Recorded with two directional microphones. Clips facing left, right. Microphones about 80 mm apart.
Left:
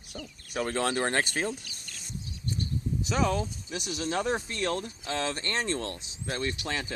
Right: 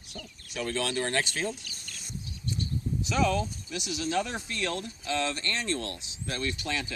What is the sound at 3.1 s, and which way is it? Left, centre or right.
Speech, left.